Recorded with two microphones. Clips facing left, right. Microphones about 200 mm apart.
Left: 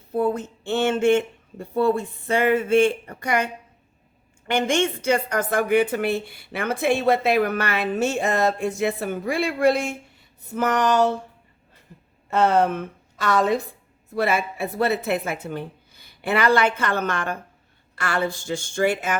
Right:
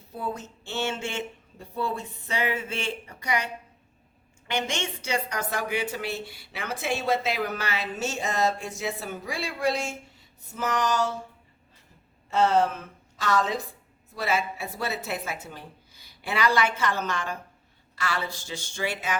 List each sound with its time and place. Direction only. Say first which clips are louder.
0.1 s a woman's voice: left 11 dB; 55° left (ahead or behind)
12.3 s a woman's voice: left 3 dB; 60° left (ahead or behind)